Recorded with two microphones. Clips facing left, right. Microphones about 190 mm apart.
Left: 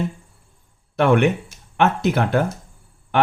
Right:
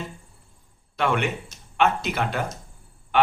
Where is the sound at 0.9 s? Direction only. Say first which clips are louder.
Left 8 dB; 55° left (ahead or behind).